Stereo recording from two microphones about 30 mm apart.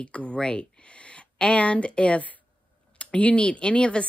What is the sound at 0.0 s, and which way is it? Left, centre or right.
Speech, left.